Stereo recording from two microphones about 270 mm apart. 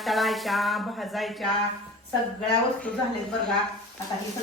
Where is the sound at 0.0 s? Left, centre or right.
Centre.